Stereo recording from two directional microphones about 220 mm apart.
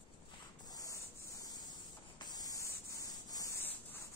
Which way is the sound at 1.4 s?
15° left (ahead or behind).